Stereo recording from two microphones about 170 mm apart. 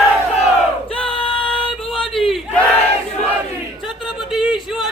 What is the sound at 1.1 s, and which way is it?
Music, 30° left (ahead or behind).